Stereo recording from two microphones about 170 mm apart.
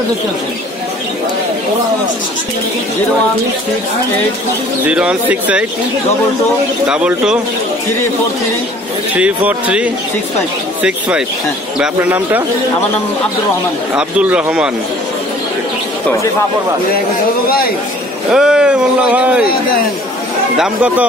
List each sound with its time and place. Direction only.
4.8 s speech: 10° right (ahead or behind)
6.9 s speech: 5° right (ahead or behind)
9.1 s speech: 10° right (ahead or behind)
13.9 s speech: 5° right (ahead or behind)
17.5 s a man's voice: 60° left (ahead or behind)
18.3 s speech: 5° right (ahead or behind)
20.5 s speech: 5° right (ahead or behind)